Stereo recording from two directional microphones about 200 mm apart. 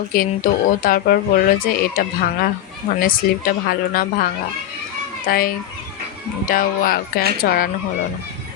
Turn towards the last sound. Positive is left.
turn(degrees=45)  # may be behind; listen again after turning